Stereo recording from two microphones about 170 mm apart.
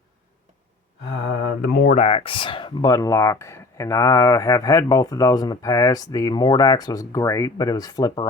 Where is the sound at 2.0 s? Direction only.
35° left (ahead or behind).